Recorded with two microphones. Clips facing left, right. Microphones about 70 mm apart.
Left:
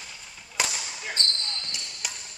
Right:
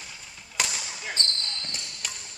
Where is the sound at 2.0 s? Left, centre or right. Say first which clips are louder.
Left 1 dB; centre.